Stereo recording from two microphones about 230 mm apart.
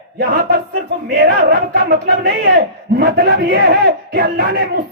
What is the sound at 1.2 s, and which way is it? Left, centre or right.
Speech, right.